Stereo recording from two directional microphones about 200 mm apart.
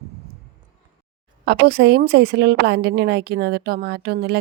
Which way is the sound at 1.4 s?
55° right (ahead or behind).